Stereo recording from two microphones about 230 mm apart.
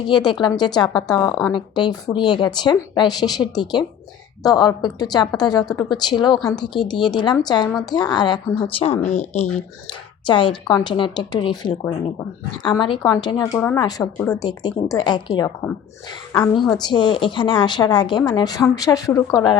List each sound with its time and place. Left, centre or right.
0.1 s a woman's voice: centre
1.5 s a woman's voice: centre
13.4 s a woman's voice: centre
16.7 s a woman's voice: centre